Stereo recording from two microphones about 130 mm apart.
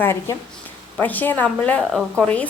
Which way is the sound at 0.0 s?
20° left (ahead or behind).